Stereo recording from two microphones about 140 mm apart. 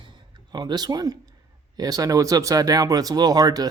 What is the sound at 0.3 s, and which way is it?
Speech, 30° right (ahead or behind).